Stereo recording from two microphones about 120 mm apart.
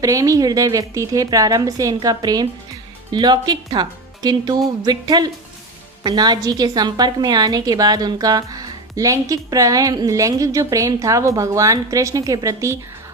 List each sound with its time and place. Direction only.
0.0 s a woman's voice: 30° right (ahead or behind)